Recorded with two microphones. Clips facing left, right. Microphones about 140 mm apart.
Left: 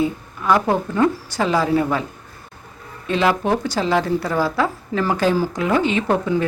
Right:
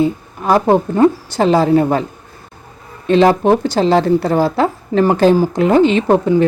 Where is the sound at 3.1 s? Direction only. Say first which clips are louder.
Right 8 dB; 30° right (ahead or behind).